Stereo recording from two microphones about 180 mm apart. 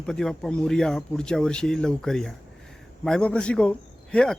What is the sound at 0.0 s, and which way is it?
Speech, 5° left (ahead or behind).